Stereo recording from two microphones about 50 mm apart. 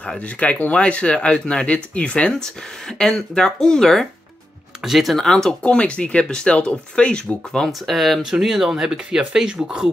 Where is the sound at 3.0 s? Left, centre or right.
Centre.